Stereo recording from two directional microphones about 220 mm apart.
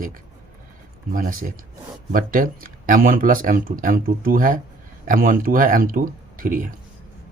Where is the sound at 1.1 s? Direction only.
40° right (ahead or behind).